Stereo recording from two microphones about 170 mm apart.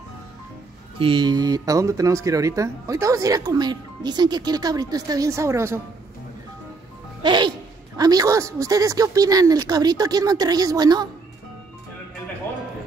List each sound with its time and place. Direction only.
0.9 s speech: 30° right (ahead or behind)
7.2 s speech: 25° right (ahead or behind)